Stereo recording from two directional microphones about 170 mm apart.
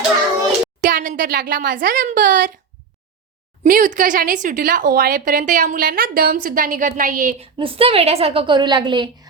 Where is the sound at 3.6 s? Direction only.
55° right (ahead or behind).